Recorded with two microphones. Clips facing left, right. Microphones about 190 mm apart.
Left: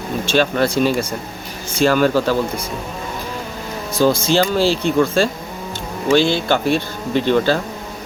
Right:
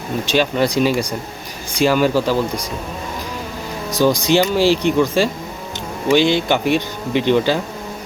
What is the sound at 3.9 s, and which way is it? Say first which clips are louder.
Speech: right 1 dB; 15° right (ahead or behind).